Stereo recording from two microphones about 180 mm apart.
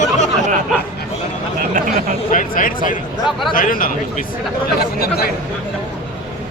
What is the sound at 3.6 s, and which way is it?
Speech, 50° left (ahead or behind).